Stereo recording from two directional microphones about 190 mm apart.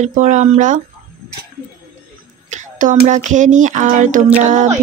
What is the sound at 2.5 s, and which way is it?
Speech, 40° right (ahead or behind).